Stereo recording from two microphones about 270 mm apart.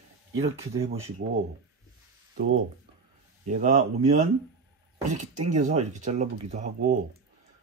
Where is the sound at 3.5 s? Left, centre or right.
Right.